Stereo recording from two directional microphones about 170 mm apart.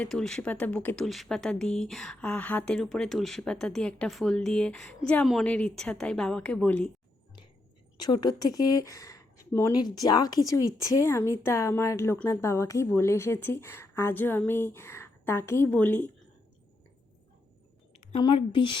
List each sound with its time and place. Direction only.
0.0 s speech: 5° left (ahead or behind)
7.9 s a woman's voice: 25° left (ahead or behind)
18.2 s speech: 30° left (ahead or behind)